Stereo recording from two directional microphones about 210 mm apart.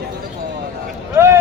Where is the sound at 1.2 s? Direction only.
10° right (ahead or behind).